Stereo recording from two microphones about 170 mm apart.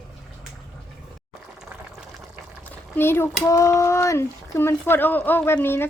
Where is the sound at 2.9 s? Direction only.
15° left (ahead or behind).